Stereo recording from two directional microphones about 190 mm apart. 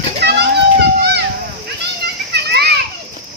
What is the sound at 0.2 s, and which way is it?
Children playing, 60° right (ahead or behind).